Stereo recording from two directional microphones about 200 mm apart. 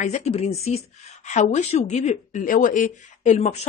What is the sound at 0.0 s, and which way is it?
Speech, 35° left (ahead or behind).